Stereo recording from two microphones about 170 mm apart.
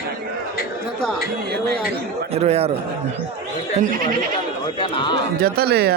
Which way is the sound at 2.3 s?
35° right (ahead or behind).